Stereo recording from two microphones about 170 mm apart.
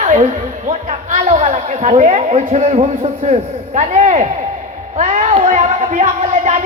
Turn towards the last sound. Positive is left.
turn(degrees=-45)  # may be behind; listen again after turning